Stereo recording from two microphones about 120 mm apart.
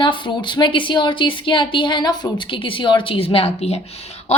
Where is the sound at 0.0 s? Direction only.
40° left (ahead or behind).